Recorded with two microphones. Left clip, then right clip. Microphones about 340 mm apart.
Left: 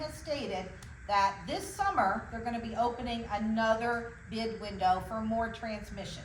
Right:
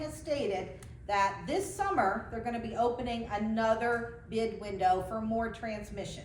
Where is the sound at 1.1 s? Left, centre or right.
Centre.